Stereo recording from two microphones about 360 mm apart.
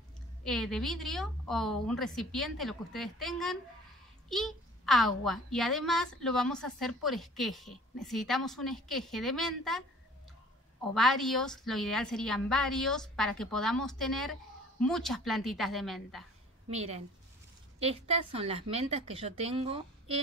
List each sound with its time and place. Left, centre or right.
0.4 s a woman's voice: centre
11.0 s a woman's voice: centre
16.7 s a woman's voice: centre